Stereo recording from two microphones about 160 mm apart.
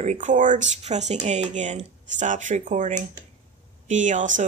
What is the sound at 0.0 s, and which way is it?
Speech, 45° right (ahead or behind).